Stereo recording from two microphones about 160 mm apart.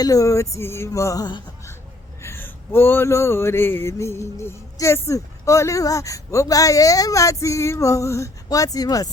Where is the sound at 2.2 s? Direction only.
15° left (ahead or behind).